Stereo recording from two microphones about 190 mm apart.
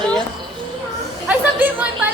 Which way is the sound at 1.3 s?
10° right (ahead or behind).